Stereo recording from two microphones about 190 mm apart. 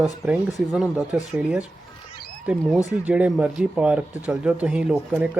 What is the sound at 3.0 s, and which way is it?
Speech, 5° right (ahead or behind).